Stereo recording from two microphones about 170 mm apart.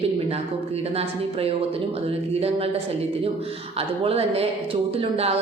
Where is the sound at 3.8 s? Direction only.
35° right (ahead or behind).